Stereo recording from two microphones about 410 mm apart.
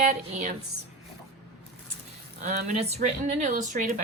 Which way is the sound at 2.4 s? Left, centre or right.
Centre.